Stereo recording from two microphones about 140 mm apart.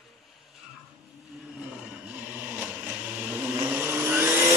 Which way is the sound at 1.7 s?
10° right (ahead or behind).